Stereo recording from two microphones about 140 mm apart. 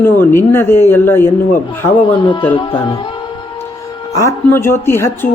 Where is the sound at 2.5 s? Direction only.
40° left (ahead or behind).